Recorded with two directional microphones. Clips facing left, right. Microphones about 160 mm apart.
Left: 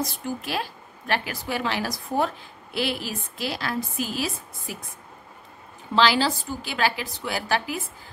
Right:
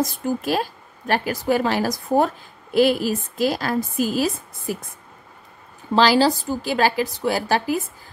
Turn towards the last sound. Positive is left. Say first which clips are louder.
# right 6 dB
turn(degrees=-40)  # may be behind; listen again after turning